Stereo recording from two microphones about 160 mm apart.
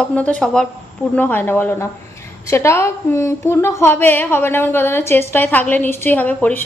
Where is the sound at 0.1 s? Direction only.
5° left (ahead or behind).